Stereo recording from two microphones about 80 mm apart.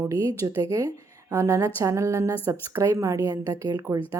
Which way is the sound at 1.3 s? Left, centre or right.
Right.